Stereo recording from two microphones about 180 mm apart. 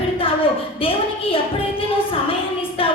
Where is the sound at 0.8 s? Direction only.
30° left (ahead or behind).